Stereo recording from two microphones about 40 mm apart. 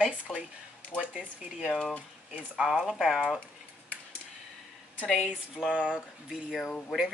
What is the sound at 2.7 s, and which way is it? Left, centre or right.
Speech, centre.